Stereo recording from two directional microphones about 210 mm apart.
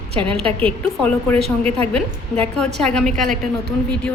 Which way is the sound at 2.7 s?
5° left (ahead or behind).